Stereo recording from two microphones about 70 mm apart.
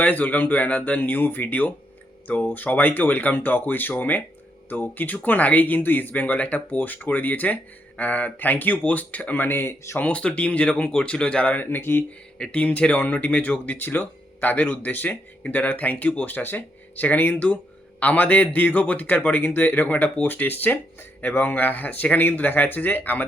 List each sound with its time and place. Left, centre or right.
0.0 s speech: left
10.0 s speech: centre
11.6 s speech: left
12.4 s speech: centre